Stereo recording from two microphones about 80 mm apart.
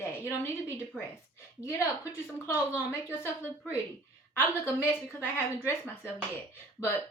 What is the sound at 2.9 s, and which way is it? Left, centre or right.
Speech, left.